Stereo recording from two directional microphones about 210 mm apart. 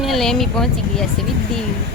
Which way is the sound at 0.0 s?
Centre (ahead or behind).